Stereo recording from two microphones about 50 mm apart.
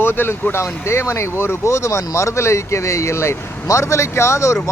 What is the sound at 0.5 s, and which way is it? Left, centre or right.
Speech, left.